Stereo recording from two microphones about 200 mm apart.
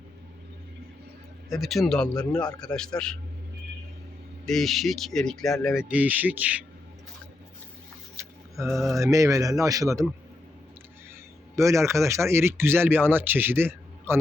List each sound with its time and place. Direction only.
1.5 s speech: centre (ahead or behind)
2.1 s a man's voice: 20° left (ahead or behind)
2.6 s speech: 5° left (ahead or behind)
4.4 s speech: centre (ahead or behind)
8.1 s a sound: 15° right (ahead or behind)
8.7 s speech: centre (ahead or behind)
9.0 s speech: 15° right (ahead or behind)
11.5 s speech: 15° right (ahead or behind)